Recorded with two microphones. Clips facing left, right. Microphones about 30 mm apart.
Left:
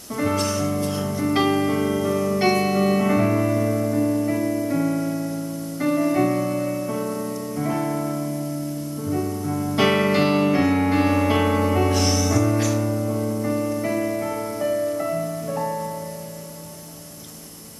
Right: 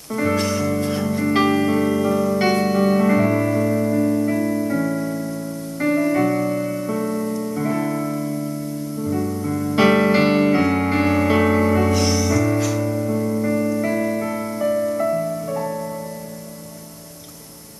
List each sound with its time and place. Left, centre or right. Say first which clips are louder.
0.2 s music: right 2 dB; centre
0.7 s music: right 3 dB; right
1.2 s music: right 2 dB; centre